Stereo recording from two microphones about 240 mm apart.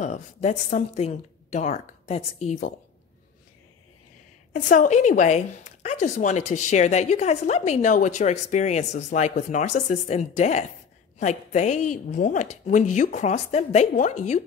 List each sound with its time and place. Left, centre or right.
0.0 s a woman's voice: left
4.5 s a woman's voice: left